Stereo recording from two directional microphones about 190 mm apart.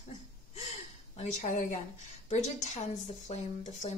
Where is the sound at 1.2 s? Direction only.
40° left (ahead or behind).